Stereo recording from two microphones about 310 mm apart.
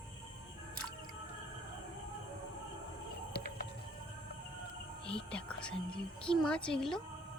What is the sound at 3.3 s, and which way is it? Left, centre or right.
Music, left.